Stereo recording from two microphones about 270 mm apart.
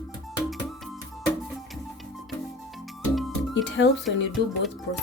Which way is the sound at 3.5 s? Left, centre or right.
Left.